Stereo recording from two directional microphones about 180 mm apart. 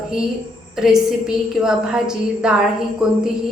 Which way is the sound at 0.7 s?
5° right (ahead or behind).